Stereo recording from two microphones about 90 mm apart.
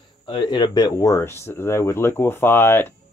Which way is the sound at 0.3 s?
55° left (ahead or behind).